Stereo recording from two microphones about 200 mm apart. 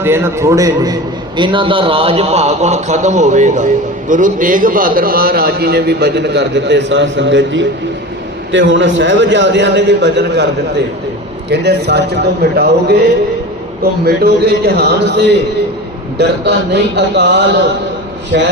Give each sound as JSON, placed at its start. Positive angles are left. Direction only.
{"t": 0.0, "sound": "a man's voice", "side_deg": -10}
{"t": 14.0, "sound": "a man's voice", "side_deg": -50}